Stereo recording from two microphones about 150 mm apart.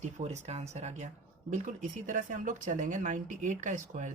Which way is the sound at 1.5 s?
60° right (ahead or behind).